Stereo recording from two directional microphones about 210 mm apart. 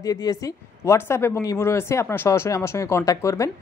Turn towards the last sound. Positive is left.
turn(degrees=15)  # may be behind; listen again after turning